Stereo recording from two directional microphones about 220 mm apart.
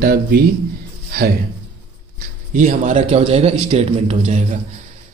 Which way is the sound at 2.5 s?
35° right (ahead or behind).